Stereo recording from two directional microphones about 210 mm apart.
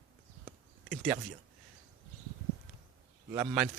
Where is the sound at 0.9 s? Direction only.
Centre (ahead or behind).